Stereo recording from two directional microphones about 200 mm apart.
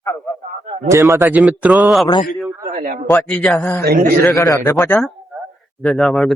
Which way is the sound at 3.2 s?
5° left (ahead or behind).